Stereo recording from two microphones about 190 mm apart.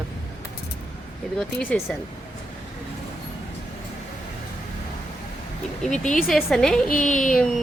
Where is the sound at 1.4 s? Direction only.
Centre (ahead or behind).